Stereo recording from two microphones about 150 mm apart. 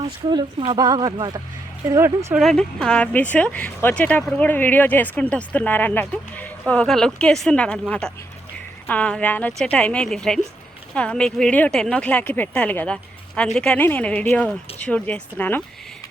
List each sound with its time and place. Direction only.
0.0 s speech: 35° right (ahead or behind)
2.3 s speech: centre (ahead or behind)